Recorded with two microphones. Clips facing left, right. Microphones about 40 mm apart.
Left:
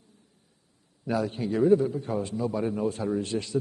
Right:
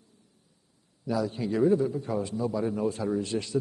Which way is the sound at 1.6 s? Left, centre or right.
Left.